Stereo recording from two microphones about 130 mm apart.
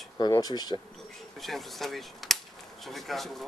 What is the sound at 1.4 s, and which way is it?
Speech, centre (ahead or behind).